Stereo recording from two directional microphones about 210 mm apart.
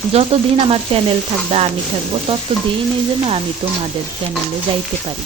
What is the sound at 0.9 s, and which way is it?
Frying, 25° right (ahead or behind).